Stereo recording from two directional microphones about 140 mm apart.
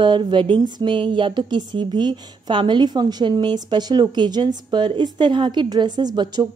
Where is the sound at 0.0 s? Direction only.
35° right (ahead or behind).